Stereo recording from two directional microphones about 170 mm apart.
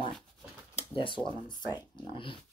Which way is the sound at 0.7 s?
30° left (ahead or behind).